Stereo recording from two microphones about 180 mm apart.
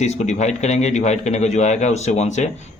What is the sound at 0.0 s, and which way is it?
A man's voice, 40° left (ahead or behind).